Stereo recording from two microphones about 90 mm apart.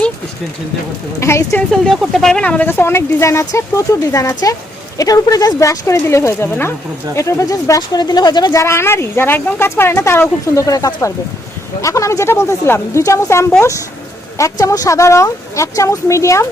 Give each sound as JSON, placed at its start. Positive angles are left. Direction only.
{"t": 1.2, "sound": "speech", "side_deg": 35}
{"t": 1.7, "sound": "speech", "side_deg": 0}
{"t": 2.6, "sound": "speech", "side_deg": 25}
{"t": 8.5, "sound": "speech", "side_deg": 30}